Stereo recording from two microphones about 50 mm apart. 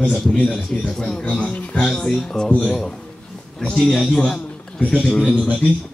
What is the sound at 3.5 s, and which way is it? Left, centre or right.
A man's voice, centre.